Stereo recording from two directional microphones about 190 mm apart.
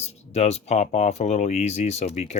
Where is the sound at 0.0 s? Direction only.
35° left (ahead or behind).